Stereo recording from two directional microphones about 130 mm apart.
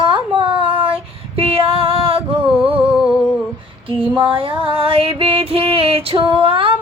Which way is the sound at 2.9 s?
5° right (ahead or behind).